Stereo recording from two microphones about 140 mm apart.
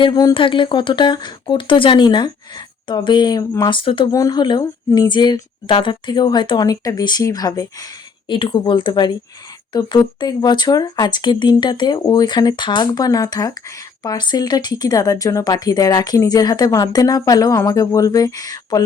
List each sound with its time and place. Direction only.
0.0 s a woman's voice: 30° left (ahead or behind)
4.1 s a woman's voice: 25° left (ahead or behind)